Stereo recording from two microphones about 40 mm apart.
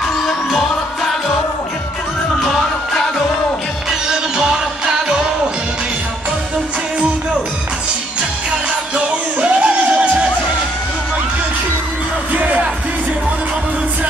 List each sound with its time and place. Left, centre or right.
8.9 s music: right